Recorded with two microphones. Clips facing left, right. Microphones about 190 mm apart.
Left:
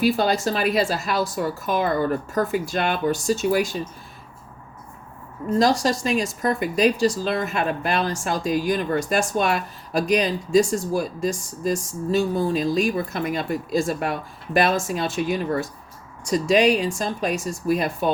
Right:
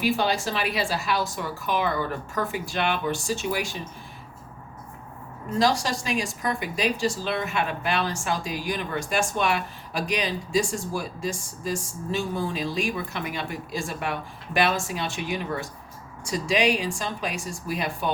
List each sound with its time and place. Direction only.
0.0 s speech: 40° left (ahead or behind)
5.5 s speech: 40° left (ahead or behind)